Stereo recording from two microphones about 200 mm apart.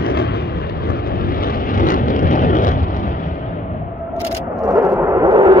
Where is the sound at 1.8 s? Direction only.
45° left (ahead or behind).